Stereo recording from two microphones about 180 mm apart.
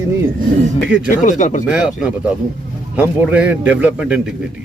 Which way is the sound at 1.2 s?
45° left (ahead or behind).